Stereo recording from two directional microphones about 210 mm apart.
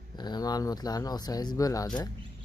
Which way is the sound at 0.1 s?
20° left (ahead or behind).